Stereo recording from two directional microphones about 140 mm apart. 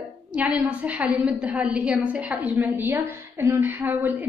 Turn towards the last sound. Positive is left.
turn(degrees=-15)  # may be behind; listen again after turning